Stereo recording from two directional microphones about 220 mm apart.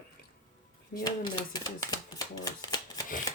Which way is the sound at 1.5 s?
15° left (ahead or behind).